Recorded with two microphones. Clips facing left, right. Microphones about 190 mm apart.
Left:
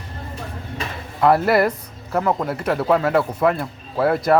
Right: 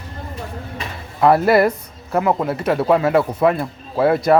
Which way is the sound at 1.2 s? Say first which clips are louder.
Right 2 dB; 25° right (ahead or behind).